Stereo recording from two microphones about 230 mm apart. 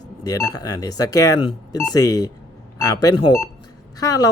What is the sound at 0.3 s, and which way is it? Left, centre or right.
Speech, centre.